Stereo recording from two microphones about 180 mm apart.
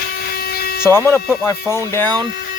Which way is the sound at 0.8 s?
15° left (ahead or behind).